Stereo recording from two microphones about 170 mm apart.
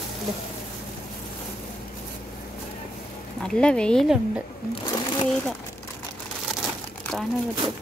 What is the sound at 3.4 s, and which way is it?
Speech, 5° left (ahead or behind).